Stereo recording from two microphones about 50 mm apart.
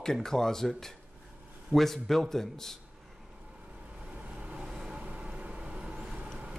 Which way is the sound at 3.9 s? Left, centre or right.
Right.